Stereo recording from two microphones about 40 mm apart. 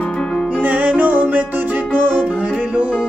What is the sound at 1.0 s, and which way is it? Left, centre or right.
Music, right.